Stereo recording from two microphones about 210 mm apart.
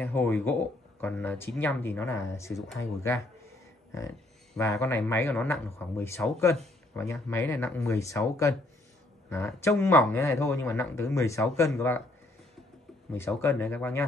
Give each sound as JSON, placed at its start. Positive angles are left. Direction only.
{"t": 0.0, "sound": "speech", "side_deg": 10}
{"t": 4.6, "sound": "speech", "side_deg": 15}
{"t": 13.1, "sound": "speech", "side_deg": 10}